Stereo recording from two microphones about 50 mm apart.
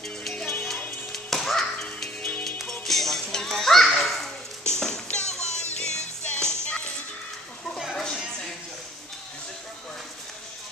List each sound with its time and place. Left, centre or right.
0.3 s music: centre
1.1 s music: centre
7.9 s a sound: centre